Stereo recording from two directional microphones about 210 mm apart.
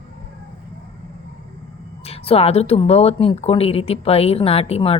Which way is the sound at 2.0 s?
30° left (ahead or behind).